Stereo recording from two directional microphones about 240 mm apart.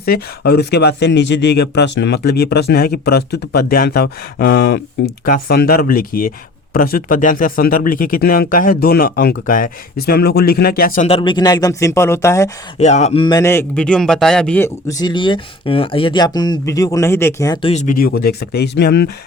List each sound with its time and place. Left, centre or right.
0.0 s speech: left; by 12.5 s centre
12.8 s a man's voice: left